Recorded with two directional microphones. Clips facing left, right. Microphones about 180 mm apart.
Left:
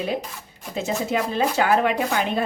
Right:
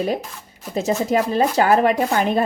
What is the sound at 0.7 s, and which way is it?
Speech, 40° right (ahead or behind).